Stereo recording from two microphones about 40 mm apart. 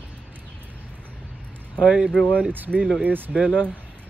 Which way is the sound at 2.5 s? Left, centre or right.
Right.